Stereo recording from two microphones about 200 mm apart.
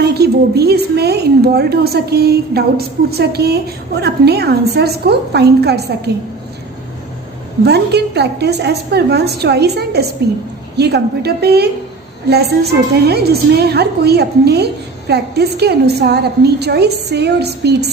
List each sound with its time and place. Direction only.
0.0 s a woman's voice: 55° right (ahead or behind)
7.6 s a woman's voice: 55° right (ahead or behind)